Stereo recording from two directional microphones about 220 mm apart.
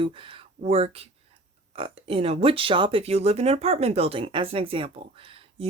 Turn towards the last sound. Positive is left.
turn(degrees=-25)  # may be behind; listen again after turning